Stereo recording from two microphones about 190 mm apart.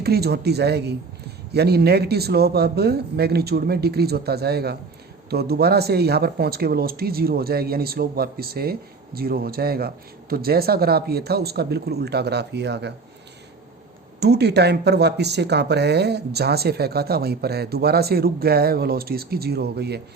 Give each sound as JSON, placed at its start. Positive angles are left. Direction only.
{"t": 0.0, "sound": "speech", "side_deg": -55}
{"t": 14.2, "sound": "speech", "side_deg": -60}